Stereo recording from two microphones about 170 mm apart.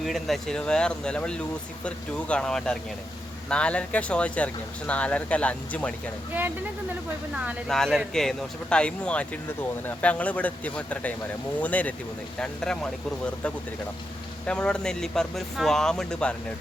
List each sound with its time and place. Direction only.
0.0 s speech: centre (ahead or behind)
7.7 s speech: centre (ahead or behind)
14.4 s speech: 5° left (ahead or behind)